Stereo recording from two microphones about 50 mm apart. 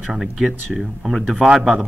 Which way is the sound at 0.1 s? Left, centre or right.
Centre.